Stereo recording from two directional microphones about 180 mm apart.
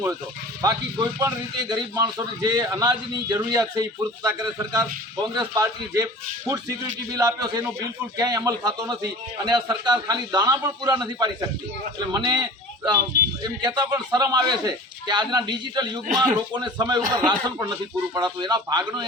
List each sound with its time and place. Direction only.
0.6 s a man's voice: 20° right (ahead or behind)
7.1 s a man's voice: 20° right (ahead or behind)